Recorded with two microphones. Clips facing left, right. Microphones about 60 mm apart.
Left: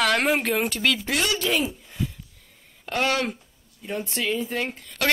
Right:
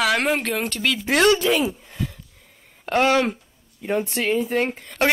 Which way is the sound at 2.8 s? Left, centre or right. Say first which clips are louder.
Right 6 dB; right.